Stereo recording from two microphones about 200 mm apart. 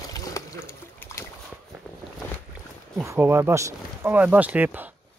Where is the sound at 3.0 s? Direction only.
10° right (ahead or behind).